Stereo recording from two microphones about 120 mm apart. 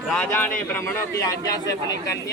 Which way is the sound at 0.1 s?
10° left (ahead or behind).